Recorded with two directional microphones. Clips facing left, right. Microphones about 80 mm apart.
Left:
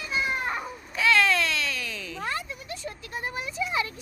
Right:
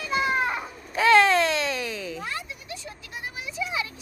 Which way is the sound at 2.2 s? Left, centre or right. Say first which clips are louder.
Left 2 dB; left.